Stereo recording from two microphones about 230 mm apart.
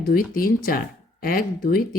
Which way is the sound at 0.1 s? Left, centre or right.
Left.